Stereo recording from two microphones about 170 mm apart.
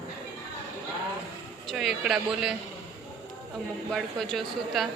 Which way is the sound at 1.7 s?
Centre (ahead or behind).